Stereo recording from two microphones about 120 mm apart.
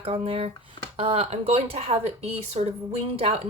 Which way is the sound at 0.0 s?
50° right (ahead or behind).